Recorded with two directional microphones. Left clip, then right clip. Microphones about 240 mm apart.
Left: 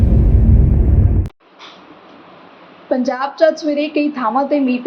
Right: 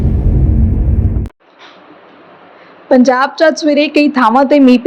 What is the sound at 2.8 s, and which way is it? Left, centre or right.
A woman's voice, right.